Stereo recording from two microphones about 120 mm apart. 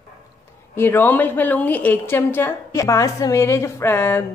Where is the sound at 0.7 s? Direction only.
20° left (ahead or behind).